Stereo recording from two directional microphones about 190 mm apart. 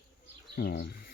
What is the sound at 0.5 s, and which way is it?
Speech, 55° left (ahead or behind).